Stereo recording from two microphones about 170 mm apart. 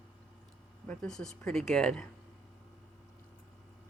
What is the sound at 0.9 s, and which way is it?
Speech, 5° left (ahead or behind).